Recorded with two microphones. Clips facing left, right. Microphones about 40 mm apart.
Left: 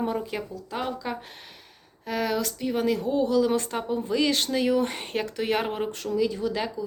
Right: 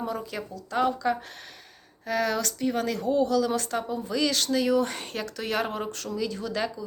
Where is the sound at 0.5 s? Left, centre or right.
Centre.